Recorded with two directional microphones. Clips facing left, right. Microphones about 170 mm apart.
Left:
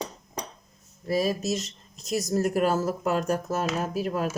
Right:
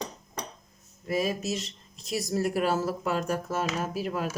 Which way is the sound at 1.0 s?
35° left (ahead or behind).